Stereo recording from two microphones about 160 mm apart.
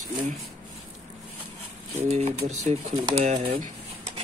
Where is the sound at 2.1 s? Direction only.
45° right (ahead or behind).